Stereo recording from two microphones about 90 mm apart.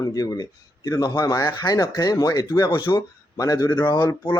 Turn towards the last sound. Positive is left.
turn(degrees=55)  # may be behind; listen again after turning